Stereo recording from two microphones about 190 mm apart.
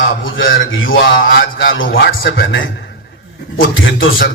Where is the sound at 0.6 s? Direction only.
90° left.